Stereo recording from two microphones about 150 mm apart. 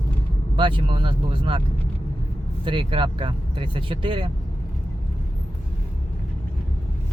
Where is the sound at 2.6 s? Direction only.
35° right (ahead or behind).